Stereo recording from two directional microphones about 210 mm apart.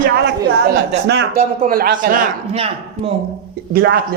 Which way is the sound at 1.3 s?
40° right (ahead or behind).